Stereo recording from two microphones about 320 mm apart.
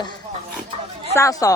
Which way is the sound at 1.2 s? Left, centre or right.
Centre.